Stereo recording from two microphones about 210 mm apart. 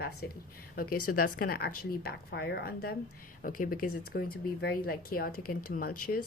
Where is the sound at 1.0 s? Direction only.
40° left (ahead or behind).